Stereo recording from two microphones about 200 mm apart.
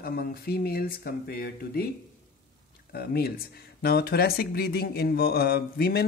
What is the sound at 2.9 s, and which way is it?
Speech, 50° left (ahead or behind).